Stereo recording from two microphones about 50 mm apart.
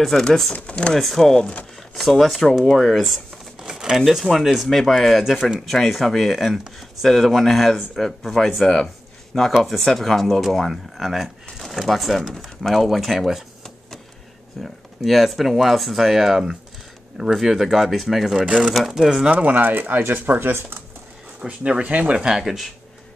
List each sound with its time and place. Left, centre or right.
0.0 s speech: centre
0.6 s speech: left
0.9 s speech: centre
3.6 s speech: centre
8.8 s a sound: centre
9.6 s speech: centre
14.6 s speech: centre
18.4 s speech: right
18.7 s speech: centre
19.0 s speech: centre
19.3 s speech: right
21.4 s speech: centre
22.4 s speech: centre